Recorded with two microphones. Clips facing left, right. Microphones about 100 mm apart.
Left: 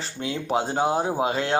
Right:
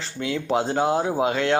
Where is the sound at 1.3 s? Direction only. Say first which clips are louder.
Right 3 dB; 35° left (ahead or behind).